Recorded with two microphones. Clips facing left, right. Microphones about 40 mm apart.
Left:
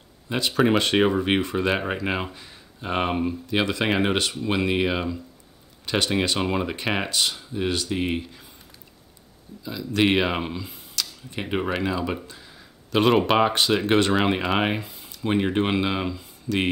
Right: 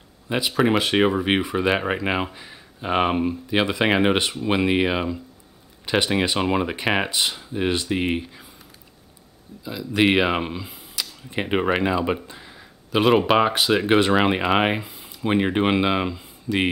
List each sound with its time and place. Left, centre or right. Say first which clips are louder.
0.3 s speech: right 1 dB; centre; by 8.2 s right
9.7 s speech: right 2 dB; centre
11.2 s speech: right 5 dB; right
13.0 s speech: right 2 dB; centre